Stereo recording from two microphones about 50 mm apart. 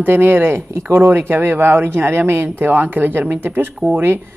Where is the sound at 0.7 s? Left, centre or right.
Right.